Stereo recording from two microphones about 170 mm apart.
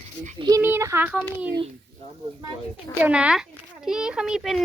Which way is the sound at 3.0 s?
5° right (ahead or behind).